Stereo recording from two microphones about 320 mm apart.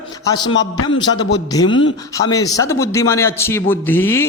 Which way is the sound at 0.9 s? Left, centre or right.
Left.